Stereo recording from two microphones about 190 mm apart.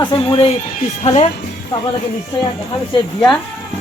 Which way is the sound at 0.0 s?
25° left (ahead or behind).